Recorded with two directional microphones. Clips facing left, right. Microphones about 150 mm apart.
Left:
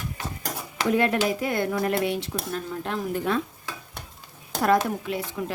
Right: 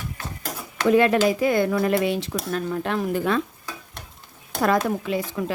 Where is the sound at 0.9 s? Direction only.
90° right.